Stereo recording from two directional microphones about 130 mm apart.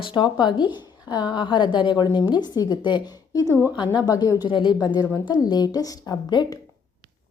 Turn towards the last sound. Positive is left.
turn(degrees=30)  # may be behind; listen again after turning